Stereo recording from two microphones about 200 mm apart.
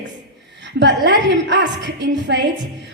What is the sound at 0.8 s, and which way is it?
A woman's voice, 60° right (ahead or behind).